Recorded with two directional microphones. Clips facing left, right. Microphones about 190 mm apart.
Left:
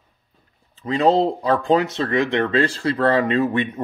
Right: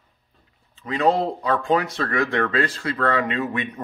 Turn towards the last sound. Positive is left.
turn(degrees=30)  # may be behind; listen again after turning